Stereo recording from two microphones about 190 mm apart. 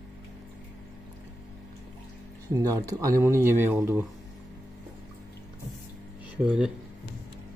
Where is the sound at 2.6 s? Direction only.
15° right (ahead or behind).